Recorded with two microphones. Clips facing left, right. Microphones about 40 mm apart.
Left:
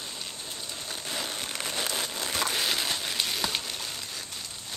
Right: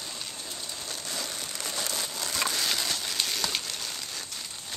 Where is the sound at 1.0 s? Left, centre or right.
Left.